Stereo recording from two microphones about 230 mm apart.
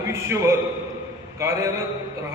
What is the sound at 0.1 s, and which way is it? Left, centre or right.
A man's voice, centre.